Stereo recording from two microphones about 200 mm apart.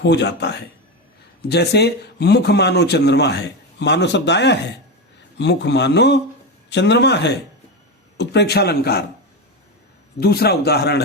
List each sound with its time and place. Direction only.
0.0 s a man's voice: 60° left (ahead or behind)
10.2 s a man's voice: 50° left (ahead or behind)